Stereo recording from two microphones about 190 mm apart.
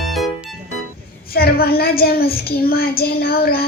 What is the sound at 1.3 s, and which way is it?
A woman's voice, 55° left (ahead or behind).